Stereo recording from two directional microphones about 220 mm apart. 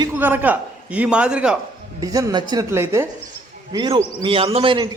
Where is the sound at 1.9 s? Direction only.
15° right (ahead or behind).